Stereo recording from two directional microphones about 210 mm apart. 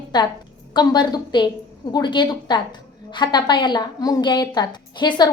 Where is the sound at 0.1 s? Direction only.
20° left (ahead or behind).